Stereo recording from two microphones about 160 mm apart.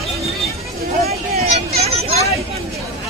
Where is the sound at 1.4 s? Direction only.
40° right (ahead or behind).